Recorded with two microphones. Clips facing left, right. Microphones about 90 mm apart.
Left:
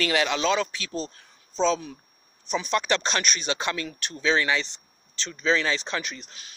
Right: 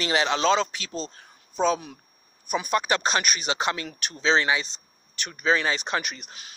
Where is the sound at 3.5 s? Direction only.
20° right (ahead or behind).